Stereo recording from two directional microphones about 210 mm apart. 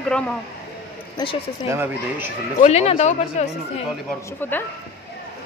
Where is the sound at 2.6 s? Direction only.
30° left (ahead or behind).